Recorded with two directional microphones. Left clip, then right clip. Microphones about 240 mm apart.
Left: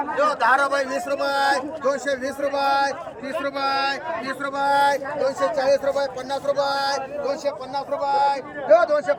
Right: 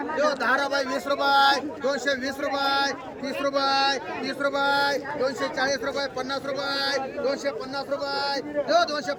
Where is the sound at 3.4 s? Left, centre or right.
Centre.